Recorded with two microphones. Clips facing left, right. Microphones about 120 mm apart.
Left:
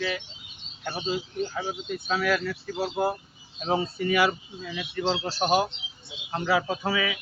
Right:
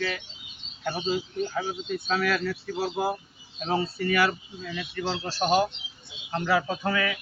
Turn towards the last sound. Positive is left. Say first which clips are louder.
# even
turn(degrees=10)  # may be behind; listen again after turning